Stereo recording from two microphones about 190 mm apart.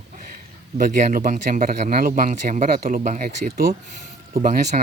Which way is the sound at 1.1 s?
45° right (ahead or behind).